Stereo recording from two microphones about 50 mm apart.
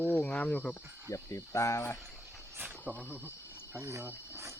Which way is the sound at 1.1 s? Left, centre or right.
Left.